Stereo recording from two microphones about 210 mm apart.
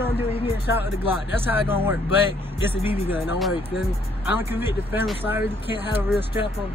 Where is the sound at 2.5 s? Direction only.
25° left (ahead or behind).